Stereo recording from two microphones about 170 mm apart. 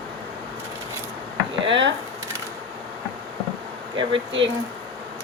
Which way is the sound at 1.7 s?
90° right.